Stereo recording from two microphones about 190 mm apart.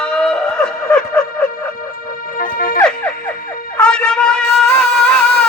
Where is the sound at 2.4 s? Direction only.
45° left (ahead or behind).